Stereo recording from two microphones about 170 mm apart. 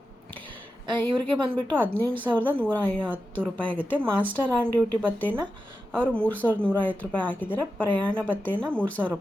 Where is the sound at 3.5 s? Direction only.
10° right (ahead or behind).